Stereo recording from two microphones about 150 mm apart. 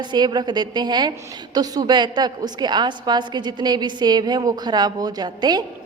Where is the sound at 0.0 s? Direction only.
30° right (ahead or behind).